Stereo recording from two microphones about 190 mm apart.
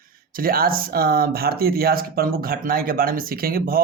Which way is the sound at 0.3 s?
50° right (ahead or behind).